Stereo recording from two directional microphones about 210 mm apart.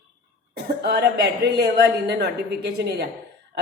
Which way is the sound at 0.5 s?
50° right (ahead or behind).